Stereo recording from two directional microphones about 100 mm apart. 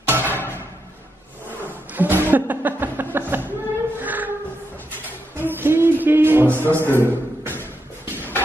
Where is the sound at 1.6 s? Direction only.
20° right (ahead or behind).